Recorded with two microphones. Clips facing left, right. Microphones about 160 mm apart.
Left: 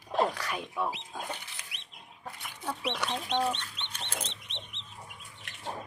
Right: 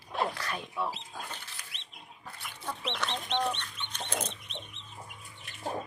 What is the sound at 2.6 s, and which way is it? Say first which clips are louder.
Speech: left 2 dB; 10° left (ahead or behind).